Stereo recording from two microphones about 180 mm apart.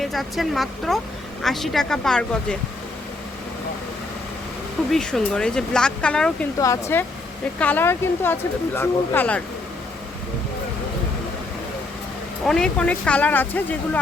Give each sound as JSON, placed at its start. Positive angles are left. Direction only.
{"t": 0.0, "sound": "speech", "side_deg": 0}
{"t": 4.9, "sound": "speech", "side_deg": 5}
{"t": 6.6, "sound": "speech", "side_deg": 15}
{"t": 12.5, "sound": "speech", "side_deg": 5}